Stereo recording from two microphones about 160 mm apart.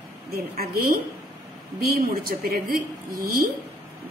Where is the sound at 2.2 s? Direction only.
65° right (ahead or behind).